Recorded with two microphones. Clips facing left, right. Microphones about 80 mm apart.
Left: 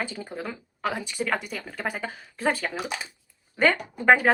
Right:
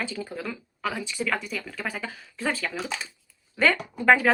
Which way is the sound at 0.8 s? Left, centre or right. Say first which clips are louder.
Left 1 dB; left.